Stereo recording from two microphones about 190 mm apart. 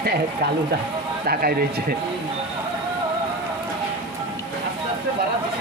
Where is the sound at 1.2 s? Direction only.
50° right (ahead or behind).